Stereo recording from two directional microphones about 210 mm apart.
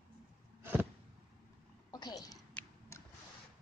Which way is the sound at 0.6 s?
10° right (ahead or behind).